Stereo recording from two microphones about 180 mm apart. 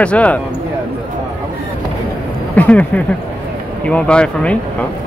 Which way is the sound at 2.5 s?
10° left (ahead or behind).